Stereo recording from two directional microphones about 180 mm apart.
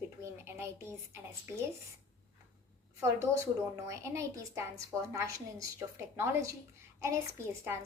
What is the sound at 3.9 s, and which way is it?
A woman's voice, 15° right (ahead or behind).